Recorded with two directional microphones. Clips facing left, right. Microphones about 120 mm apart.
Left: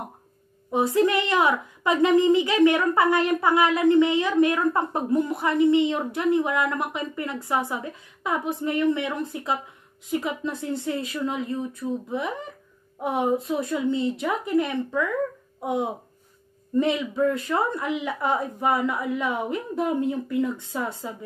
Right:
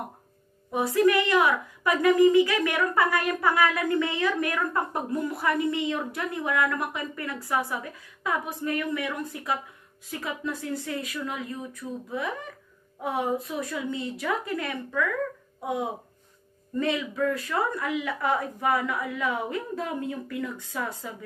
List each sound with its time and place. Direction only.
0.7 s a woman's voice: 25° left (ahead or behind)